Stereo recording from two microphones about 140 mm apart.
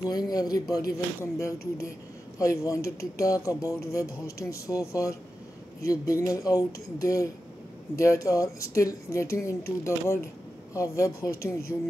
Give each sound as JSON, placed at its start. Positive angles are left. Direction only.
{"t": 0.0, "sound": "speech", "side_deg": 25}